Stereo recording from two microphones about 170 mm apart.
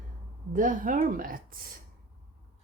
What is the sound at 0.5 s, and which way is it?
Speech, 50° right (ahead or behind).